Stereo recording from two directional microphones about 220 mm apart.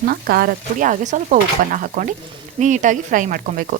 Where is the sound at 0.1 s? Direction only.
45° right (ahead or behind).